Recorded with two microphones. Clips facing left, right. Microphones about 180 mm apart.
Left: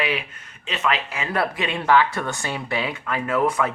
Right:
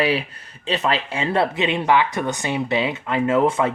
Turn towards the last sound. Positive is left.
turn(degrees=-25)  # may be behind; listen again after turning